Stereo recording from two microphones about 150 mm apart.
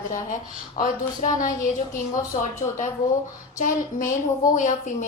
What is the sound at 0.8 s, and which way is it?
A woman's voice, 60° left (ahead or behind).